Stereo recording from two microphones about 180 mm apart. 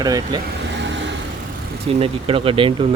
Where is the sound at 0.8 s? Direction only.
80° right.